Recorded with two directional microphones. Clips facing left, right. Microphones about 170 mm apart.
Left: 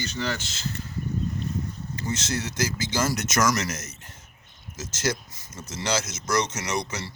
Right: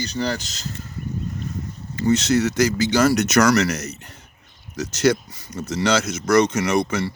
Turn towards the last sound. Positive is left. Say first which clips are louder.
# right 9 dB
turn(degrees=-55)  # may be behind; listen again after turning